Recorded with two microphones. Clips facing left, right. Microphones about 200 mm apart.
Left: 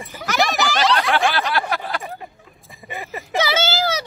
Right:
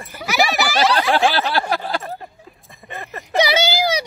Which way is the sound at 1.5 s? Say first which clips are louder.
Right 2 dB; 30° right (ahead or behind).